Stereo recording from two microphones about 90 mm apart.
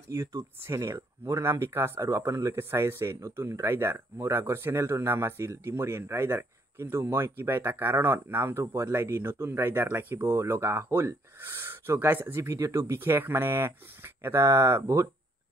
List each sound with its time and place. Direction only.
0.1 s speech: 35° right (ahead or behind)